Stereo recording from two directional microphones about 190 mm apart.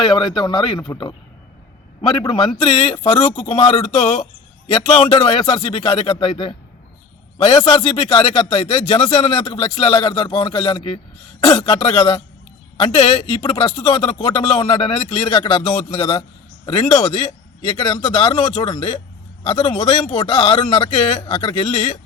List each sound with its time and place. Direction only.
0.9 s a man's voice: 25° left (ahead or behind)